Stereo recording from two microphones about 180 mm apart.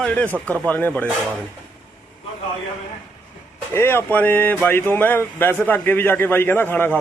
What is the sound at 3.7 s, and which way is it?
Speech, 15° left (ahead or behind).